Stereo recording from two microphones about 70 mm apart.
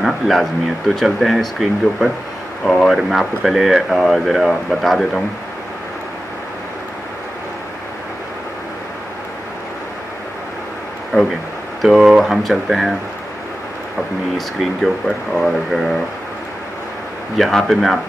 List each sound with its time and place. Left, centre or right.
0.0 s speech: centre
12.2 s speech: centre
14.3 s speech: centre
17.4 s speech: centre